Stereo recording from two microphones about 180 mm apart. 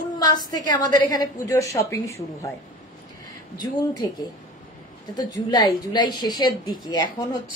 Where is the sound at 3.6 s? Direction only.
20° left (ahead or behind).